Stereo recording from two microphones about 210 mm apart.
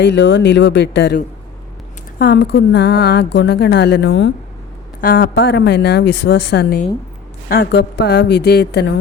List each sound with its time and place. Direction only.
0.0 s a woman's voice: 55° left (ahead or behind)
4.9 s a woman's voice: 45° left (ahead or behind)